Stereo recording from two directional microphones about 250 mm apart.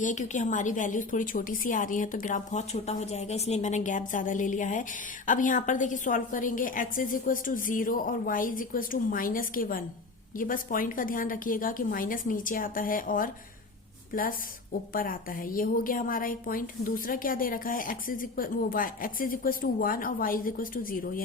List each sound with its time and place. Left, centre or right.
0.0 s a woman's voice: left